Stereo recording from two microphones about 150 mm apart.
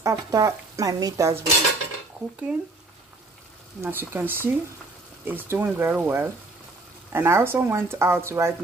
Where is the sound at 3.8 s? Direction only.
15° right (ahead or behind).